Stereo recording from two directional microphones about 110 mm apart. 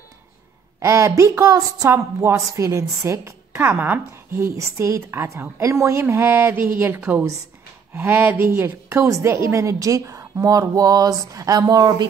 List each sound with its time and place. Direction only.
0.7 s a woman's voice: 25° right (ahead or behind)